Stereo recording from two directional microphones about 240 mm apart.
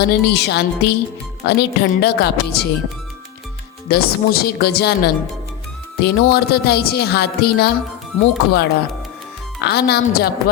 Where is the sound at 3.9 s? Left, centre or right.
Left.